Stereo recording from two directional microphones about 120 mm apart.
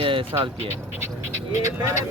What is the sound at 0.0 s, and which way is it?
Music, 50° right (ahead or behind).